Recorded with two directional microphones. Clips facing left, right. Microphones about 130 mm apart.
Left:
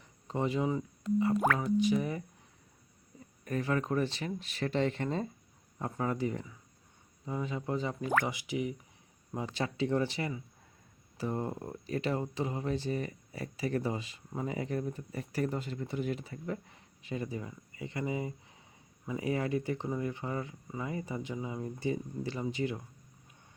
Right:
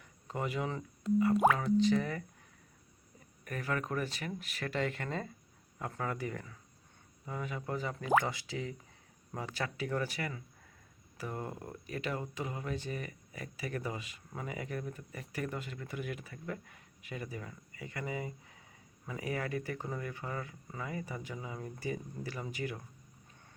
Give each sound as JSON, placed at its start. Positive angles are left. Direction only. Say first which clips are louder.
{"t": 0.3, "sound": "speech", "louder": "left 5 dB", "side_deg": 25}
{"t": 3.4, "sound": "speech", "louder": "left 5 dB", "side_deg": 25}